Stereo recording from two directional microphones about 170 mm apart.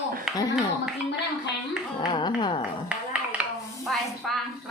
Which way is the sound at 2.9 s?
10° right (ahead or behind).